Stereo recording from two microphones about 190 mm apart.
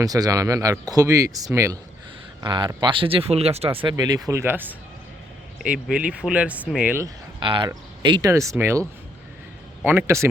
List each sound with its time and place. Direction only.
0.0 s speech: 20° right (ahead or behind)
7.3 s speech: 25° right (ahead or behind)
9.8 s speech: 10° right (ahead or behind)